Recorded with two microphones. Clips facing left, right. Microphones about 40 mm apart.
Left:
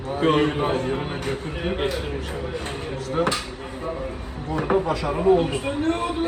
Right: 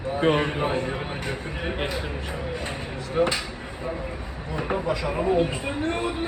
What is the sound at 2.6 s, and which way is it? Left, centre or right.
Speech, right.